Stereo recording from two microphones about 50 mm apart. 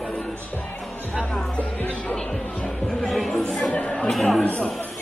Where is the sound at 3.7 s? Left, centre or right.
Left.